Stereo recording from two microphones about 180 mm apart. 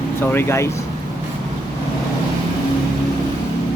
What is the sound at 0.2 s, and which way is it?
Speech, 15° left (ahead or behind).